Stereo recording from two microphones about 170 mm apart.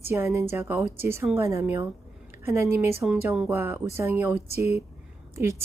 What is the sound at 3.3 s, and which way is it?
Speech, 5° right (ahead or behind).